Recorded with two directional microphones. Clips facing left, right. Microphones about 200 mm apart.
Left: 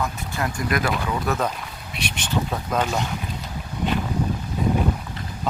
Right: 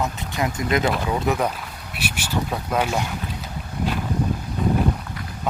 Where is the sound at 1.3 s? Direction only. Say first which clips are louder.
Right 2 dB; 10° right (ahead or behind).